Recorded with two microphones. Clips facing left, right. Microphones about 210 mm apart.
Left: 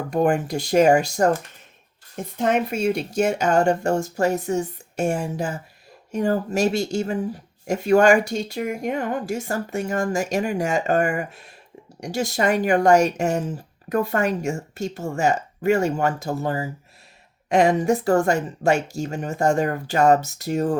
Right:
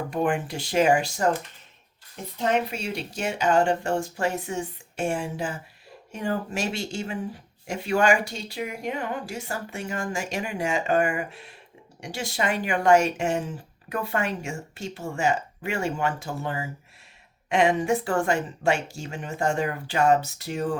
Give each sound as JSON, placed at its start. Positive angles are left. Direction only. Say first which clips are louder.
{"t": 0.1, "sound": "speech", "louder": "left 7 dB", "side_deg": 40}
{"t": 2.4, "sound": "speech", "louder": "left 5 dB", "side_deg": 50}